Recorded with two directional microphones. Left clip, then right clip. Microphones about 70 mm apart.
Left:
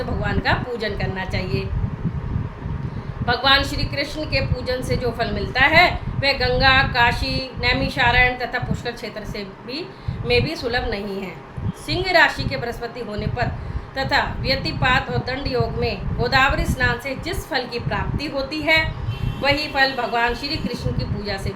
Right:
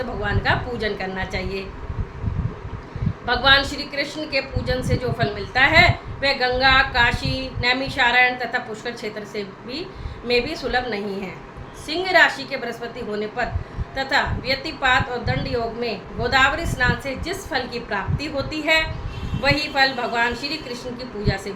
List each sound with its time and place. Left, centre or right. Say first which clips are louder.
0.2 s a woman's voice: even; left
3.2 s a woman's voice: right 1 dB; left
10.2 s a woman's voice: left 1 dB; left